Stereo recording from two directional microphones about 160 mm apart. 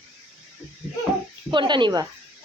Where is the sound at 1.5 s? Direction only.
30° right (ahead or behind).